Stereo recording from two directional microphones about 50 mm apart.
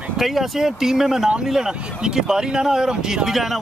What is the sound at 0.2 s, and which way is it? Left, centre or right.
A man's voice, centre.